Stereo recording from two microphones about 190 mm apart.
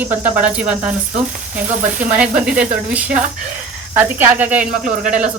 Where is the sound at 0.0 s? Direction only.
10° right (ahead or behind).